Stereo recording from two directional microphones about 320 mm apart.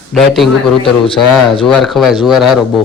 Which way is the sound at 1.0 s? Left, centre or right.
Centre.